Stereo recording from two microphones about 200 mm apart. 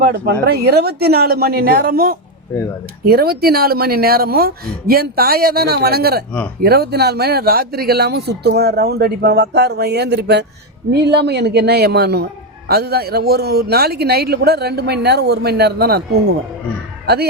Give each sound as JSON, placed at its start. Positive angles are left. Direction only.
{"t": 0.0, "sound": "a woman's voice", "side_deg": -50}